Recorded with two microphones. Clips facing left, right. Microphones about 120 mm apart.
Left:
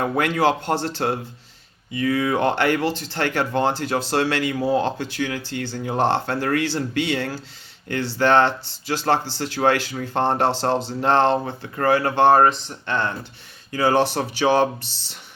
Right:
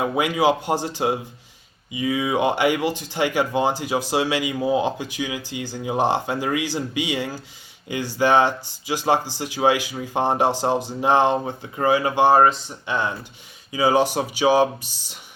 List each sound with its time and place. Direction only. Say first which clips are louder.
0.0 s speech: even; 10° right (ahead or behind)